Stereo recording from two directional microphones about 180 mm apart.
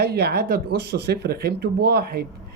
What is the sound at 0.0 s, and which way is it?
Speech, 65° right (ahead or behind).